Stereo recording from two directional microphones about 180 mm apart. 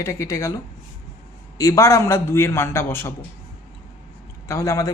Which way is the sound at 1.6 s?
20° left (ahead or behind).